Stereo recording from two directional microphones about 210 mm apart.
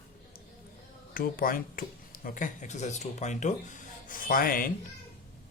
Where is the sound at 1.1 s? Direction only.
45° left (ahead or behind).